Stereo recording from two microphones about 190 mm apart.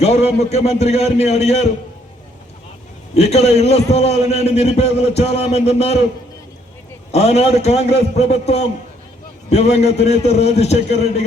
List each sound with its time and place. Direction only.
0.0 s a man's voice: 35° left (ahead or behind)
3.2 s a man's voice: 35° left (ahead or behind)
7.1 s a man's voice: 35° left (ahead or behind)